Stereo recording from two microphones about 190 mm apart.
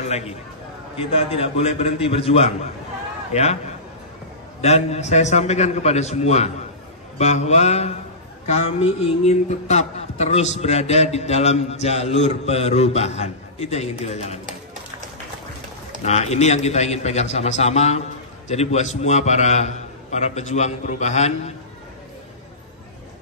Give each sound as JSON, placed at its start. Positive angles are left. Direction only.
{"t": 0.0, "sound": "a man's voice", "side_deg": 35}
{"t": 4.6, "sound": "speech", "side_deg": 35}
{"t": 16.0, "sound": "speech", "side_deg": 35}